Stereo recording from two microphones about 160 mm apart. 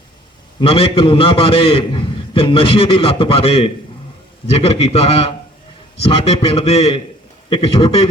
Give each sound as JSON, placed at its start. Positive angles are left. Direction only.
{"t": 0.6, "sound": "a man's voice", "side_deg": 35}